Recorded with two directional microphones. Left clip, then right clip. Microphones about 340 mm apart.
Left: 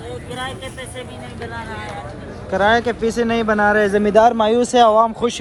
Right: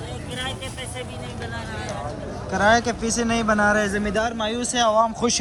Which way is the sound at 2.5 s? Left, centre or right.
Centre.